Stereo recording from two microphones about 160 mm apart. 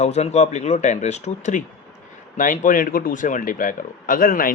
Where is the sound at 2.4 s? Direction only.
55° left (ahead or behind).